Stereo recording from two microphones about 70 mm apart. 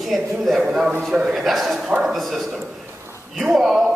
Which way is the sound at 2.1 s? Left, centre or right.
Centre.